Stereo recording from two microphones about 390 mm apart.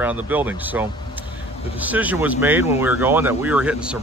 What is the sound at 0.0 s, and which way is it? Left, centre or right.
Speech, centre.